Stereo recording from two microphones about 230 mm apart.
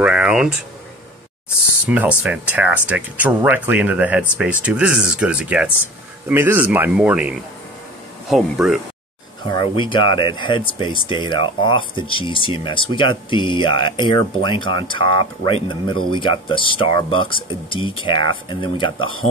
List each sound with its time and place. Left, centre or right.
0.0 s speech: centre
1.9 s speech: centre
9.5 s speech: left